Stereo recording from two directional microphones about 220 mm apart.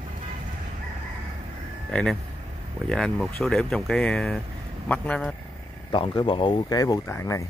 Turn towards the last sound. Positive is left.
turn(degrees=15)  # may be behind; listen again after turning